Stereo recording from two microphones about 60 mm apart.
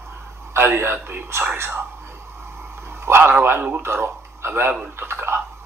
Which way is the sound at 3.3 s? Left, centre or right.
Right.